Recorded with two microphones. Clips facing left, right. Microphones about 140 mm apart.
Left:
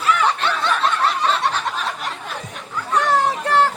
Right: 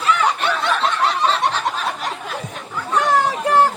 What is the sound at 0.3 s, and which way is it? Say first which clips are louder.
Snicker: right 1 dB; 15° right (ahead or behind).